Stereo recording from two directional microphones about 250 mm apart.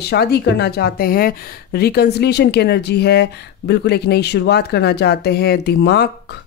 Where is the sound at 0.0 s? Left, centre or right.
Left.